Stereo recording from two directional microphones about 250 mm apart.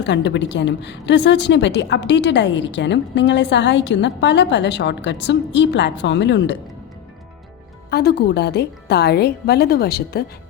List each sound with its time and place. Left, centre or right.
0.0 s a woman's voice: left
7.9 s a woman's voice: left